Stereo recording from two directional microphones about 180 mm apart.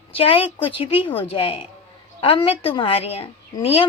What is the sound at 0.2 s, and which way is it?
A woman's voice, 30° left (ahead or behind).